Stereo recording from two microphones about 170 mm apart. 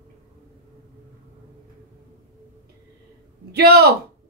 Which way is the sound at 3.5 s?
70° right (ahead or behind).